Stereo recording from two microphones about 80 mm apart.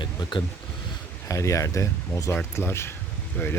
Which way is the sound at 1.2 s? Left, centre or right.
Left.